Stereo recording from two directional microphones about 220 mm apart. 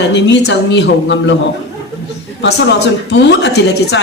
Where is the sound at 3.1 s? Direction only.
50° left (ahead or behind).